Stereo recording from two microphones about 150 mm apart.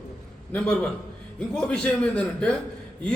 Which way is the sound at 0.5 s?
5° left (ahead or behind).